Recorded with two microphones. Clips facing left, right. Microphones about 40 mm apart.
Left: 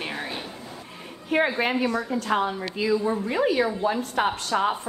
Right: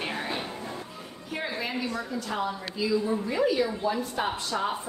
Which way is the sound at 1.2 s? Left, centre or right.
Left.